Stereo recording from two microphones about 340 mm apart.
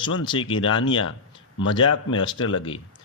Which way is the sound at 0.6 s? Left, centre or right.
Left.